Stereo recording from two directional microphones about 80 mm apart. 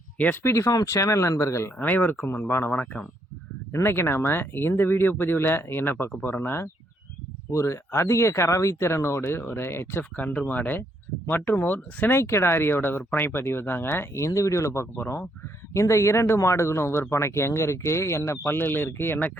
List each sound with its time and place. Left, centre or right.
0.4 s speech: left
0.7 s speech: left
1.8 s speech: left
7.5 s speech: left